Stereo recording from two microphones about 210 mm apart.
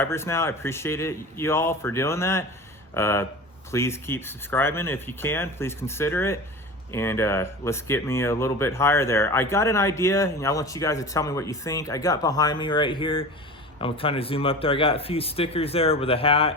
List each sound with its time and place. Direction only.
0.0 s speech: 10° left (ahead or behind)